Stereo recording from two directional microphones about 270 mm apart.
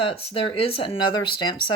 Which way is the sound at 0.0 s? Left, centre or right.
Left.